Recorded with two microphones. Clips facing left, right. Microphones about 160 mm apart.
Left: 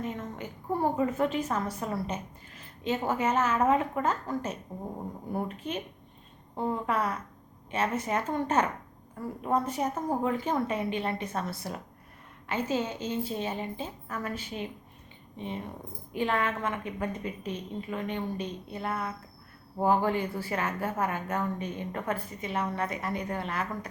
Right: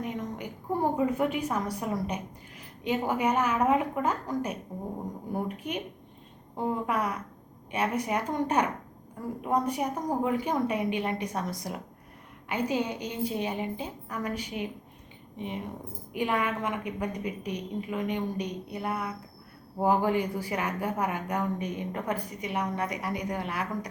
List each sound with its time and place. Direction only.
0.0 s a woman's voice: 15° right (ahead or behind)